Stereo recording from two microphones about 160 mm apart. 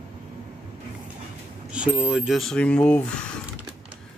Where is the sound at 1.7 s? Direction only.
5° right (ahead or behind).